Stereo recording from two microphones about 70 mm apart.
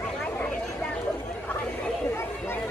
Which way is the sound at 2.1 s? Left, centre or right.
Left.